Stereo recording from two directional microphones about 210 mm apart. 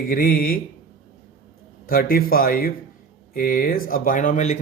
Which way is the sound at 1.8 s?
45° left (ahead or behind).